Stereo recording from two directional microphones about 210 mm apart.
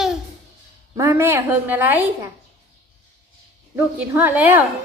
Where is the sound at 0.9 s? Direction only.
15° right (ahead or behind).